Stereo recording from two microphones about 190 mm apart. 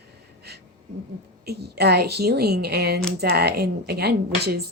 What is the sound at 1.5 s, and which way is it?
Speech, 55° right (ahead or behind).